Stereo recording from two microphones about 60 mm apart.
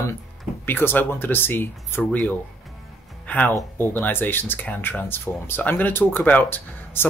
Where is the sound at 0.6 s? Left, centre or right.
Left.